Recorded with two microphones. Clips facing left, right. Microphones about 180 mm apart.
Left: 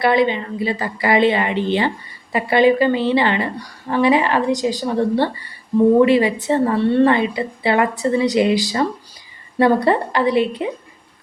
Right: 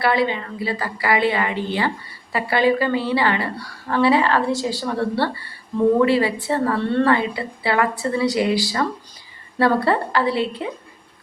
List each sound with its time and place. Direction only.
0.0 s a woman's voice: 20° left (ahead or behind)